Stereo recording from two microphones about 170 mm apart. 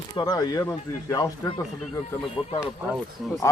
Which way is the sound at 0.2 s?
25° left (ahead or behind).